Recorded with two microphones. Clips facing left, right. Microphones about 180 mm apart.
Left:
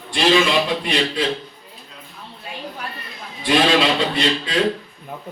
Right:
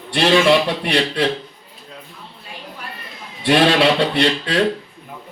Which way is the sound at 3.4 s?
65° right (ahead or behind).